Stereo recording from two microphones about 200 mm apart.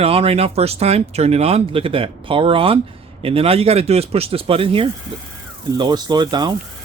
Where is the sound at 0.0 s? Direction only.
30° right (ahead or behind).